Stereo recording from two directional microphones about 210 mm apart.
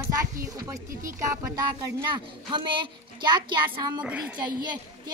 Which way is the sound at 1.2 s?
15° right (ahead or behind).